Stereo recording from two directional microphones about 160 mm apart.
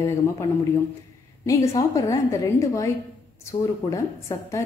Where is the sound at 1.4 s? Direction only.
20° left (ahead or behind).